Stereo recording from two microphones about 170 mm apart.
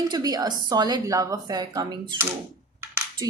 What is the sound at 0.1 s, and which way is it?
Speech, 25° right (ahead or behind).